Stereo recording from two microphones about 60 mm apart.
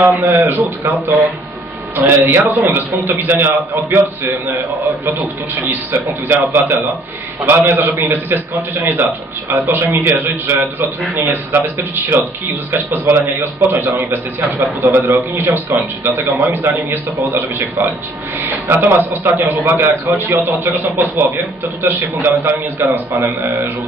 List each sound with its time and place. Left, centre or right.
0.3 s a man's voice: right
19.9 s a man's voice: right